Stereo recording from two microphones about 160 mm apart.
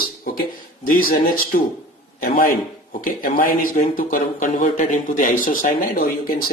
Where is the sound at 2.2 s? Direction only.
60° left (ahead or behind).